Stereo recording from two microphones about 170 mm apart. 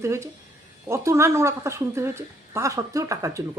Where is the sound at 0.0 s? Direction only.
15° right (ahead or behind).